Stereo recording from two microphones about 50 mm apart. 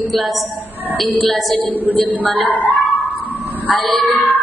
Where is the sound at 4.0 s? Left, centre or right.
Left.